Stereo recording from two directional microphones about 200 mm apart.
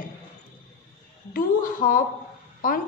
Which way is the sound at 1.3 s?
45° left (ahead or behind).